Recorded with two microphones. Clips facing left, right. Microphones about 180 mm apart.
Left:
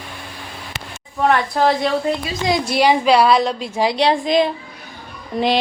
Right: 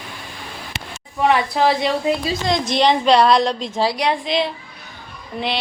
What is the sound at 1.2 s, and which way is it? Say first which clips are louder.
Speech: even; 5° right (ahead or behind).